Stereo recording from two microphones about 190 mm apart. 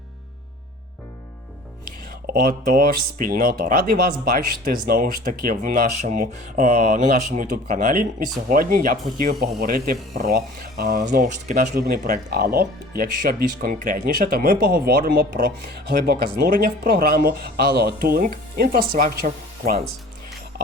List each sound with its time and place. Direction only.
2.2 s speech: 50° right (ahead or behind)